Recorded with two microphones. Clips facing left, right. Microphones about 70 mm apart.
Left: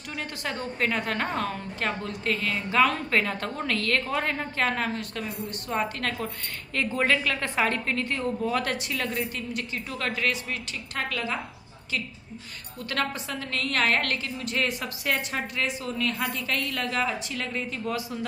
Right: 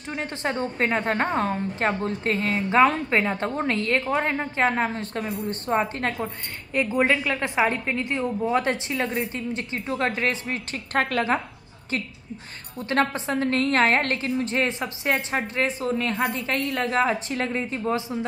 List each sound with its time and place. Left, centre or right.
0.1 s a woman's voice: right
12.7 s a woman's voice: right